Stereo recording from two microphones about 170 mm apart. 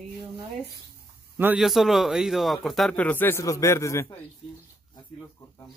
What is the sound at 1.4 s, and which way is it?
Speech, 5° right (ahead or behind).